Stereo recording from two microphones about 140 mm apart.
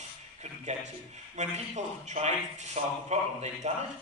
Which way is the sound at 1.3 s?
55° right (ahead or behind).